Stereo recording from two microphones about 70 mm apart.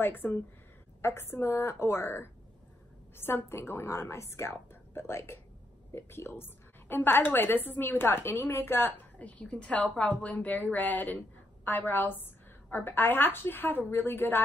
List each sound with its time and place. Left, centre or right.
0.0 s a woman's voice: left
9.2 s a woman's voice: centre; by 14.4 s left